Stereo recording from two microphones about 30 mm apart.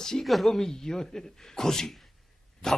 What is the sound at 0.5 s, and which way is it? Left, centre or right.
Speech, centre.